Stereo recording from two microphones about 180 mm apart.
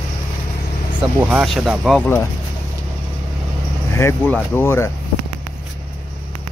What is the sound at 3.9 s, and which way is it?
Speech, 10° left (ahead or behind).